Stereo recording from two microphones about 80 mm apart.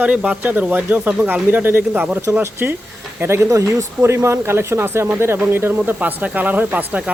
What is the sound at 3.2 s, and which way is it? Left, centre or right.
Speech, right.